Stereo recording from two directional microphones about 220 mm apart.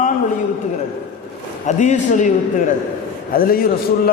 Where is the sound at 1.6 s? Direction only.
35° left (ahead or behind).